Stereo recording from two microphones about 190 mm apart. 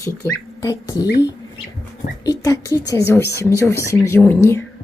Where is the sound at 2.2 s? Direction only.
20° left (ahead or behind).